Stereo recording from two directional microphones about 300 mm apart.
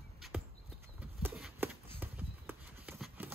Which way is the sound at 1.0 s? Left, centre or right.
Centre.